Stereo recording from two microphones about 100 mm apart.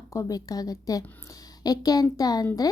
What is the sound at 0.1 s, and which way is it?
Speech, 35° left (ahead or behind).